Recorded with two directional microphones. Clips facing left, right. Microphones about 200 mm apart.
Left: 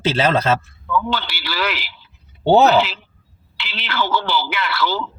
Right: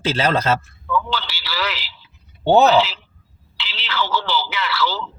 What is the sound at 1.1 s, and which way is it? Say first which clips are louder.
Speech: left 2 dB; 55° left (ahead or behind).